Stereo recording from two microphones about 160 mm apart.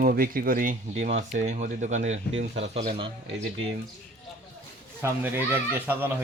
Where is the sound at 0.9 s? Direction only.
45° right (ahead or behind).